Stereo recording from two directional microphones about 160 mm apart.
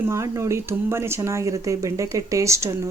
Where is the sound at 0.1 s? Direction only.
20° right (ahead or behind).